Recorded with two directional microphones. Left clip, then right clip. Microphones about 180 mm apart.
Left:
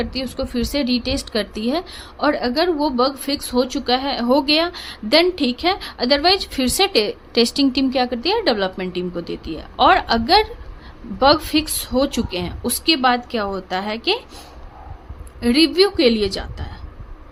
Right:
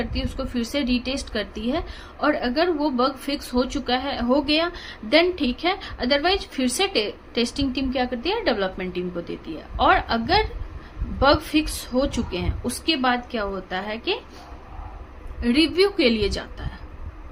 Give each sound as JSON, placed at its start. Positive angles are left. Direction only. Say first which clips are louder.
{"t": 0.0, "sound": "speech", "louder": "left 5 dB", "side_deg": 35}
{"t": 15.4, "sound": "a woman's voice", "louder": "left 4 dB", "side_deg": 35}